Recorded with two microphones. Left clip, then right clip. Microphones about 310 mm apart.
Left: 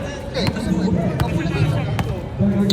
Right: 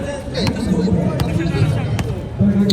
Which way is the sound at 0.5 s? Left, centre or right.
Centre.